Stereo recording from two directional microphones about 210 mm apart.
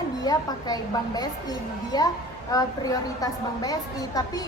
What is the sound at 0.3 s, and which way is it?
A woman's voice, 20° left (ahead or behind).